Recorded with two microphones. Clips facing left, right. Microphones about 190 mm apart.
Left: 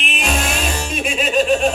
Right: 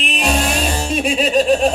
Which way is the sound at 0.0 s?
35° right (ahead or behind).